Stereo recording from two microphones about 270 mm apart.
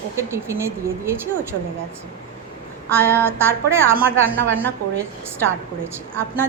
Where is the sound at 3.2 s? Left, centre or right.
Centre.